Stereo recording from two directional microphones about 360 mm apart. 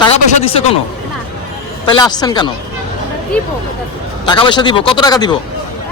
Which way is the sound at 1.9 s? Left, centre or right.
Centre.